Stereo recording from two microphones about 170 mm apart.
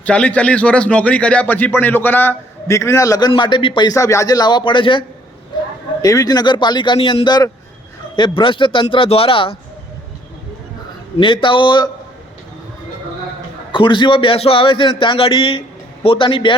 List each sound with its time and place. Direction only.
0.0 s a man's voice: 10° left (ahead or behind); by 9.6 s 30° left (ahead or behind)
11.2 s a man's voice: 30° left (ahead or behind)
13.7 s a man's voice: 30° left (ahead or behind)